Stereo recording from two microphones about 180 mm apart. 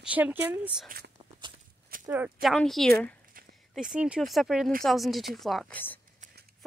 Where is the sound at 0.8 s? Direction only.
60° right (ahead or behind).